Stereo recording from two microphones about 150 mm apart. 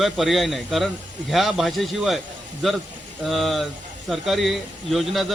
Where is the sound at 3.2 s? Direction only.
Centre (ahead or behind).